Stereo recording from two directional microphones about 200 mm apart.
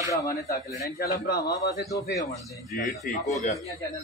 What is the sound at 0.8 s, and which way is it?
Speech, 50° left (ahead or behind).